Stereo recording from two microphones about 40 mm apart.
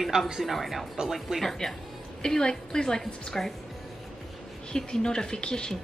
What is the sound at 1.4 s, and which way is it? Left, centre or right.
A woman's voice, centre.